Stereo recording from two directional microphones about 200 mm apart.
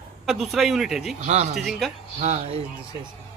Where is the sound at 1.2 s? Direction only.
35° right (ahead or behind).